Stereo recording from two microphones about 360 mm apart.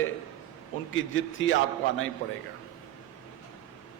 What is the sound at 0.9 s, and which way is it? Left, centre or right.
A man's voice, left.